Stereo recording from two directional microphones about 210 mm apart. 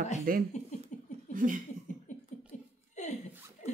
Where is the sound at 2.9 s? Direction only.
35° left (ahead or behind).